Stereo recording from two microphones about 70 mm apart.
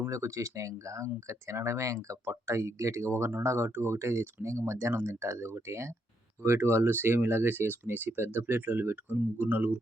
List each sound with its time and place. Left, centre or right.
0.1 s speech: right
2.2 s speech: right